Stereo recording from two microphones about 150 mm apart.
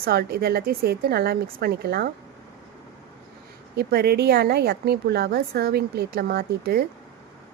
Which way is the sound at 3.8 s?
90° right.